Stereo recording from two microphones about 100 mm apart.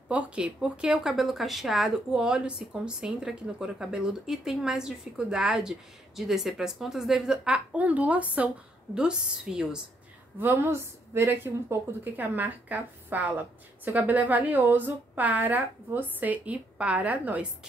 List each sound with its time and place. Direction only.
0.1 s speech: 10° right (ahead or behind)
10.4 s speech: 25° right (ahead or behind)